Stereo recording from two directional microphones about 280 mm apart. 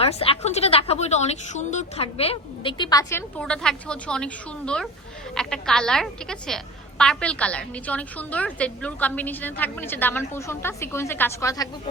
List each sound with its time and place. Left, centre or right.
0.0 s a woman's voice: left